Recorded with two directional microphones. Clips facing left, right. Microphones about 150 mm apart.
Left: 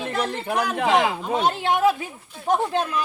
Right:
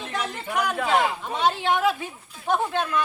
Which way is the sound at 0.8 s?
90° left.